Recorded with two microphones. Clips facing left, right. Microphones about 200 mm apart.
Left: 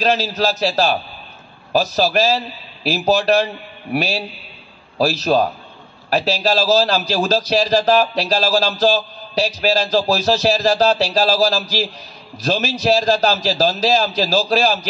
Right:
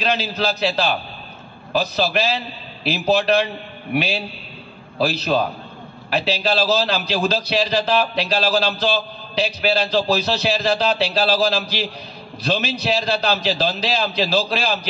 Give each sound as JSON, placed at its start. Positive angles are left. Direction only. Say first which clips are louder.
{"t": 0.0, "sound": "a man's voice", "louder": "left 4 dB", "side_deg": 40}
{"t": 4.9, "sound": "a man's voice", "louder": "left 3 dB", "side_deg": 40}